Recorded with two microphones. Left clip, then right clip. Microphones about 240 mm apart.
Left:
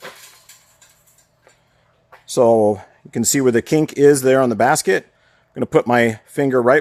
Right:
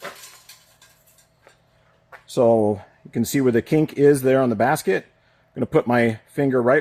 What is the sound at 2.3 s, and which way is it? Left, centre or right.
Speech, left.